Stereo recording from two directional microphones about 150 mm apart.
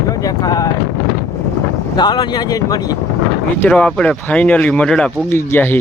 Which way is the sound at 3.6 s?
10° left (ahead or behind).